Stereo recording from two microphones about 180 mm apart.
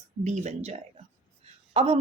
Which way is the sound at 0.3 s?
40° right (ahead or behind).